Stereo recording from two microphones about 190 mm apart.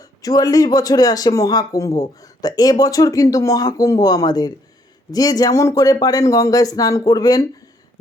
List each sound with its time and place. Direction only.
0.0 s speech: 20° left (ahead or behind)